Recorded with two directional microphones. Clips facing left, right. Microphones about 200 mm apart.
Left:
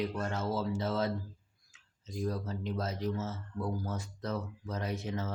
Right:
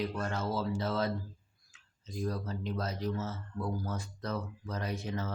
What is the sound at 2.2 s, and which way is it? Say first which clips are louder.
Speech: left 1 dB; 20° left (ahead or behind).